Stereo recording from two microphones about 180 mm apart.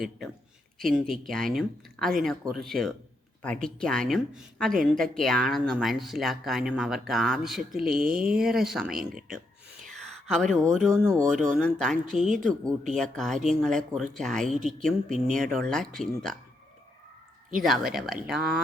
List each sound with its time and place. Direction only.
0.8 s speech: centre (ahead or behind)
7.9 s speech: 50° right (ahead or behind)
8.4 s speech: centre (ahead or behind)
17.6 s speech: centre (ahead or behind)